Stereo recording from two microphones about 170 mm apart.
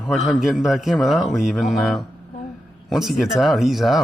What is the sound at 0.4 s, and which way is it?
Speech, centre (ahead or behind).